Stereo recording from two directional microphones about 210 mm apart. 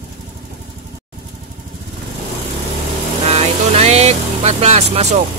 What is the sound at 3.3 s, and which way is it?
Vehicle, 30° right (ahead or behind).